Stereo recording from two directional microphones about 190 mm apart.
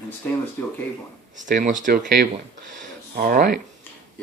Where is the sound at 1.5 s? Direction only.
45° right (ahead or behind).